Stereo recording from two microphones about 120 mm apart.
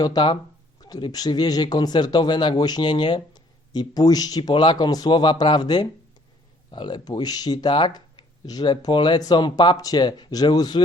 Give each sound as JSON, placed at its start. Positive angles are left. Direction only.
{"t": 0.0, "sound": "a man's voice", "side_deg": 40}